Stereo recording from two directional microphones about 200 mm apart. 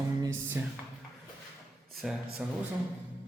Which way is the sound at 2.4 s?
10° right (ahead or behind).